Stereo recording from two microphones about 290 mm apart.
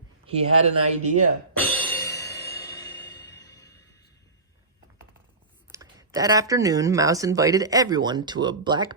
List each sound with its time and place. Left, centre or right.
0.4 s speech: right
1.5 s music: centre
5.7 s speech: centre